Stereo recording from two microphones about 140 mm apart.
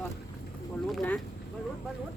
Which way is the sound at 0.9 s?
10° left (ahead or behind).